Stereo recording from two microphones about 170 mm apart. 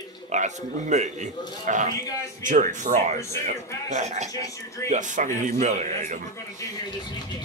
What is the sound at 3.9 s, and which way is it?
A man's voice, 45° right (ahead or behind).